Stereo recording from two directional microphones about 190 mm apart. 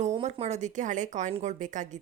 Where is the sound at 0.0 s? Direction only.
35° right (ahead or behind).